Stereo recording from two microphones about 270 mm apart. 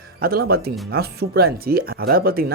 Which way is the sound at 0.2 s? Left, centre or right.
Right.